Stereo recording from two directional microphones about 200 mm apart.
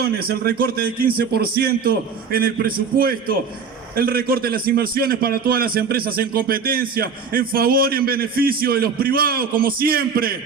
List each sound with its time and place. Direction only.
0.0 s a man's voice: 50° right (ahead or behind)